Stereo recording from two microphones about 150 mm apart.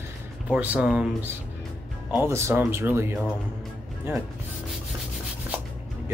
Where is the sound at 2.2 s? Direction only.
15° right (ahead or behind).